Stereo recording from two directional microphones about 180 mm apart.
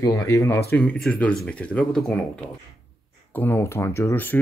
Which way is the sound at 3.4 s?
10° left (ahead or behind).